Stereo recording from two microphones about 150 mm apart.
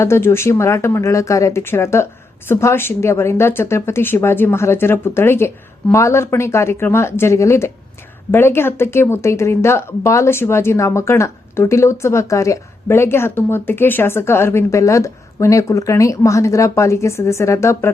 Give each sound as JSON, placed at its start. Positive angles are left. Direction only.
{"t": 0.0, "sound": "speech", "side_deg": 15}